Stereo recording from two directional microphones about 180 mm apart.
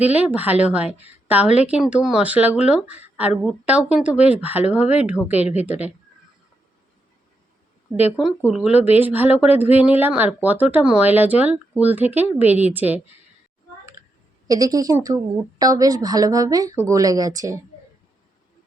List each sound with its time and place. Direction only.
0.0 s speech: 10° right (ahead or behind)
7.9 s speech: 5° right (ahead or behind)
14.4 s speech: 20° right (ahead or behind)